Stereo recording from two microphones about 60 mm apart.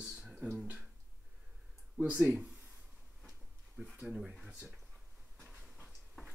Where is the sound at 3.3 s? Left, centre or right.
Centre.